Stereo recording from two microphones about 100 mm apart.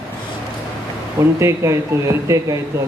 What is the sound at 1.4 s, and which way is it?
Speech, 30° right (ahead or behind).